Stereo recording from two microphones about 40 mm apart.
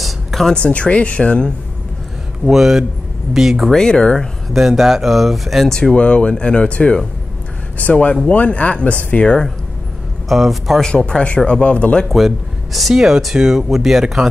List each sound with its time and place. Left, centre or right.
0.0 s a sound: centre
0.6 s speech: left
2.5 s speech: centre
3.7 s speech: centre
4.6 s speech: centre
5.9 s speech: left
7.7 s speech: left
10.2 s speech: centre
10.8 s speech: left
12.9 s speech: centre